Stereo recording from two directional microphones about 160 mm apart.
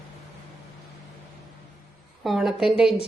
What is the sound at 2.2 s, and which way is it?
Speech, centre (ahead or behind).